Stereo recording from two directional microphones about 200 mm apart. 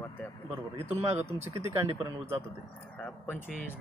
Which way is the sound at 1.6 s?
15° right (ahead or behind).